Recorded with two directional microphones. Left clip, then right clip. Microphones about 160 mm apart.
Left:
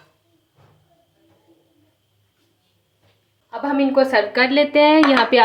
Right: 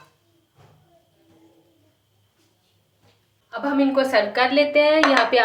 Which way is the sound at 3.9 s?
35° left (ahead or behind).